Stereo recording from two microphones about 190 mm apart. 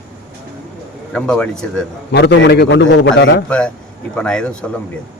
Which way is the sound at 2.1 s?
60° left (ahead or behind).